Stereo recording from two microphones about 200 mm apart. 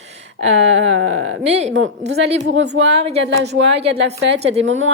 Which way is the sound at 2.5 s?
65° right (ahead or behind).